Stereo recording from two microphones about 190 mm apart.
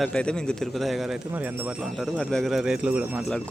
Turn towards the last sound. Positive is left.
turn(degrees=0)  # may be behind; listen again after turning